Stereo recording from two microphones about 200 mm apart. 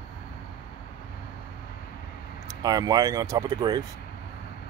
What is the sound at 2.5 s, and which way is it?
Speech, 20° right (ahead or behind).